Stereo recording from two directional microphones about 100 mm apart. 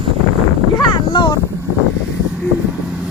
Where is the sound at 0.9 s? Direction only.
50° left (ahead or behind).